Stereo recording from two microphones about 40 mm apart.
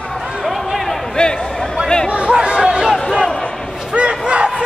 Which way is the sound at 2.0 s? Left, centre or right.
Right.